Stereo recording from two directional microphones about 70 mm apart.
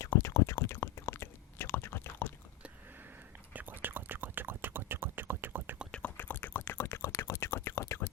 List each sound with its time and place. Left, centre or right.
0.0 s whispering: left
3.5 s whispering: right
6.1 s a sound: left